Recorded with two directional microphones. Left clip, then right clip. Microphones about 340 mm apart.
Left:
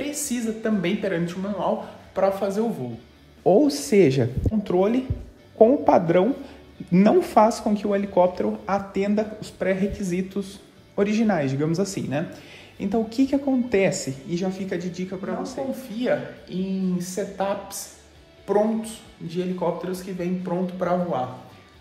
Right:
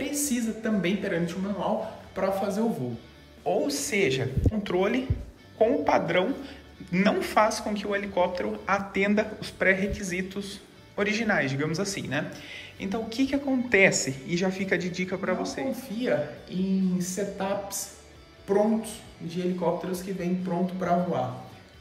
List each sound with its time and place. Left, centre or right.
0.0 s speech: centre
3.4 s speech: left; by 21.2 s centre